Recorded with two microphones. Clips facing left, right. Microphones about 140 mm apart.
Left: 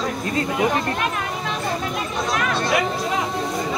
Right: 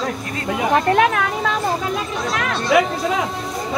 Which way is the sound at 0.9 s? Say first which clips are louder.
Right 9 dB; 90° right.